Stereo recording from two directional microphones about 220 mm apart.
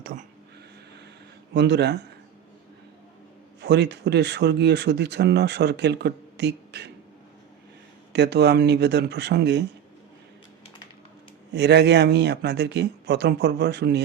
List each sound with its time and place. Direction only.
0.0 s a sound: 40° right (ahead or behind)
1.5 s speech: 50° right (ahead or behind)
3.6 s speech: 50° right (ahead or behind)
8.1 s speech: 50° right (ahead or behind)
11.5 s speech: 50° right (ahead or behind)